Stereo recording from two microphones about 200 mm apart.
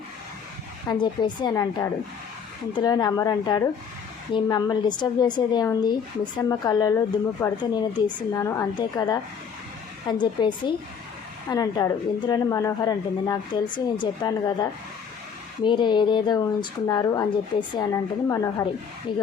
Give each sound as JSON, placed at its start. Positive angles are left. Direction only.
{"t": 0.9, "sound": "a woman's voice", "side_deg": 20}